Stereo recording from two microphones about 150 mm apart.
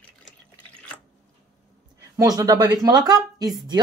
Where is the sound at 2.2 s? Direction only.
25° right (ahead or behind).